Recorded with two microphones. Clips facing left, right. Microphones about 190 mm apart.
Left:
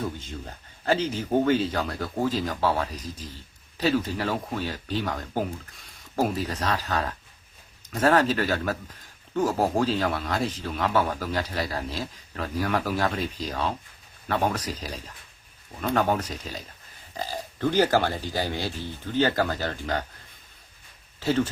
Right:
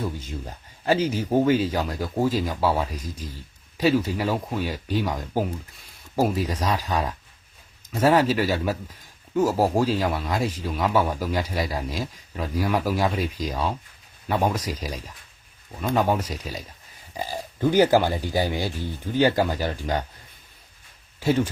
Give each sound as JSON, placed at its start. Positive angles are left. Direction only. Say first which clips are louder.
{"t": 0.2, "sound": "speech", "louder": "right 3 dB", "side_deg": -10}
{"t": 21.2, "sound": "speech", "louder": "right 2 dB", "side_deg": -10}